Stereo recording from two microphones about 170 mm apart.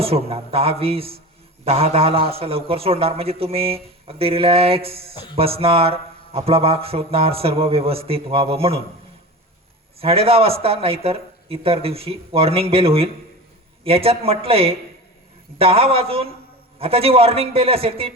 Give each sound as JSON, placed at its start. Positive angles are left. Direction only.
{"t": 0.0, "sound": "speech", "side_deg": -35}
{"t": 10.0, "sound": "speech", "side_deg": -35}